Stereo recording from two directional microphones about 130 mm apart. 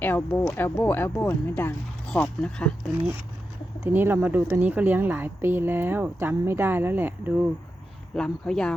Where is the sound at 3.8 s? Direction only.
15° right (ahead or behind).